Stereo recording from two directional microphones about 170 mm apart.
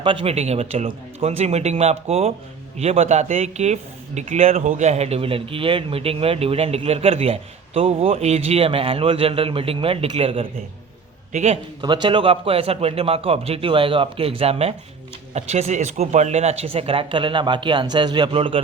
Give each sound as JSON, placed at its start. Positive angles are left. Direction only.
{"t": 0.0, "sound": "speech", "side_deg": -30}
{"t": 11.8, "sound": "speech", "side_deg": -25}